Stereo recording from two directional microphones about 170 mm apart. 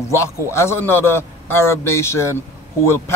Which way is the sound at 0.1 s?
15° left (ahead or behind).